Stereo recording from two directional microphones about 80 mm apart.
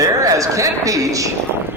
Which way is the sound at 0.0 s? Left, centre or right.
Right.